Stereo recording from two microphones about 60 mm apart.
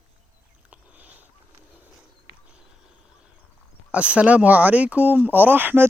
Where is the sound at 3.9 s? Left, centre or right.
Centre.